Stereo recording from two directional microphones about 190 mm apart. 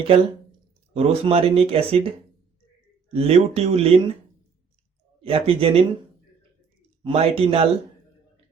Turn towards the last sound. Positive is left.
turn(degrees=-30)  # may be behind; listen again after turning